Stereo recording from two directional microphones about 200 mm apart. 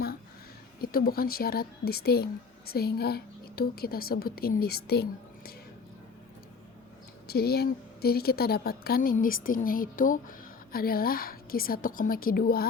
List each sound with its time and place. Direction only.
0.8 s a woman's voice: 50° left (ahead or behind)
7.3 s a woman's voice: 50° left (ahead or behind)